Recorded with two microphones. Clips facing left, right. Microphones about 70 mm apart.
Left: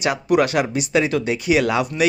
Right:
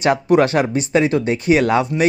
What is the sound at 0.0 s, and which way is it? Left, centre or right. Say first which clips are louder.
Speech: right 4 dB; right.